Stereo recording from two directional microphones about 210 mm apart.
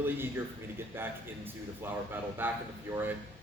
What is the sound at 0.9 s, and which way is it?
Speech, 10° right (ahead or behind).